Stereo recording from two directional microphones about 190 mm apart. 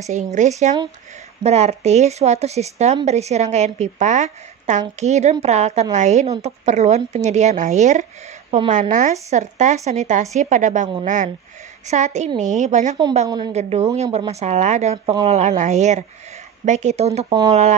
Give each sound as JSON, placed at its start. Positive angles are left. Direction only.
{"t": 0.0, "sound": "a woman's voice", "side_deg": -40}